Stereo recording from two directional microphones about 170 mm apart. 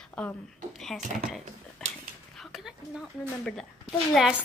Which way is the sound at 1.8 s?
5° left (ahead or behind).